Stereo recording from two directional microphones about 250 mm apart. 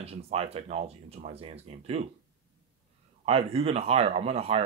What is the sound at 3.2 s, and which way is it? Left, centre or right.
Speech, right.